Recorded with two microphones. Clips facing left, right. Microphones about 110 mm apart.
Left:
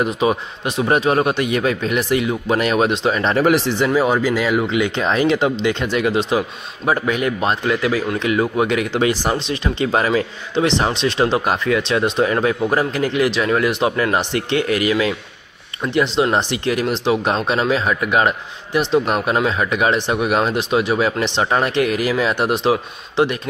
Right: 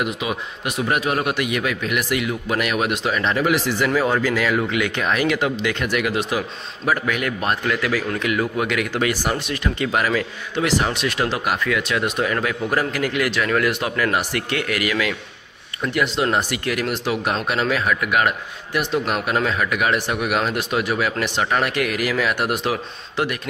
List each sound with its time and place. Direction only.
0.0 s speech: 35° left (ahead or behind)